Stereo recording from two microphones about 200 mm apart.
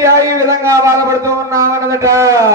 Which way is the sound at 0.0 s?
15° right (ahead or behind).